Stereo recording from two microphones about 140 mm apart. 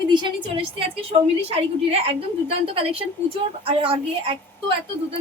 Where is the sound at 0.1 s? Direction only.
35° right (ahead or behind).